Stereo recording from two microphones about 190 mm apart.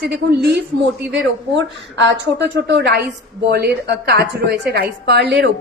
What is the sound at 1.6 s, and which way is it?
A woman's voice, 70° right (ahead or behind).